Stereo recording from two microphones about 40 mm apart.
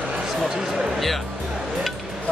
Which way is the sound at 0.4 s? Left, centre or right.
Centre.